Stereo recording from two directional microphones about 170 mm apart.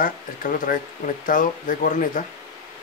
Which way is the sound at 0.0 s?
55° left (ahead or behind).